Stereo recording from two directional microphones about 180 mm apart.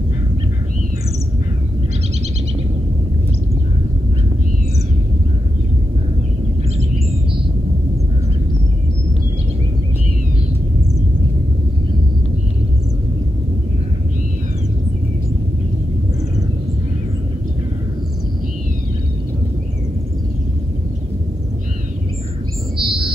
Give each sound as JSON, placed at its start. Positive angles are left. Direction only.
{"t": 22.8, "sound": "bird", "side_deg": -30}